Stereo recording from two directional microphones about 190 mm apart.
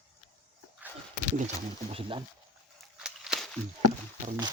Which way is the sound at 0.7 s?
10° right (ahead or behind).